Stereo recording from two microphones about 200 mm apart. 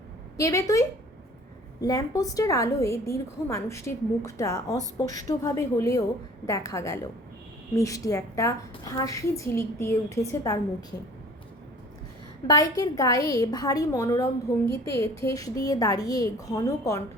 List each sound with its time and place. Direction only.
0.3 s a woman's voice: 15° left (ahead or behind)
12.5 s a woman's voice: 15° left (ahead or behind)